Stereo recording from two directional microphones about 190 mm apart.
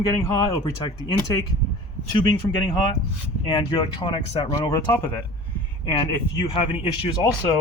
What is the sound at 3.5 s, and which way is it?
Speech, 25° left (ahead or behind).